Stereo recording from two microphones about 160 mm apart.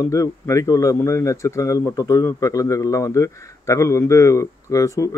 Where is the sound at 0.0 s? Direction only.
20° left (ahead or behind).